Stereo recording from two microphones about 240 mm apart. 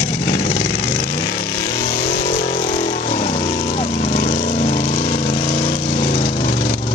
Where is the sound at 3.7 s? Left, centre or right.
Left.